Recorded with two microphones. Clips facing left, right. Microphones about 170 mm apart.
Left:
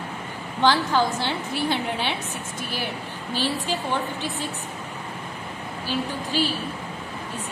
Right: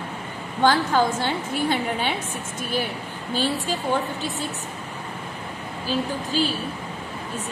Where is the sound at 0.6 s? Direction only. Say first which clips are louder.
Right 1 dB; 45° right (ahead or behind).